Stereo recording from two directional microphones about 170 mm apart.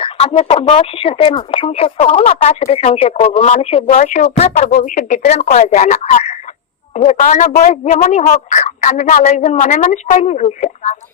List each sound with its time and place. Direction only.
0.0 s a woman's voice: 40° left (ahead or behind)